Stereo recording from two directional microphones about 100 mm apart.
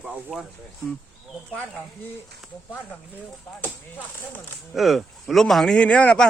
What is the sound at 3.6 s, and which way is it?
Speech, 20° left (ahead or behind).